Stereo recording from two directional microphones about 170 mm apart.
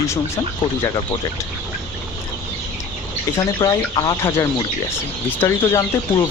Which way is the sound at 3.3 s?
20° left (ahead or behind).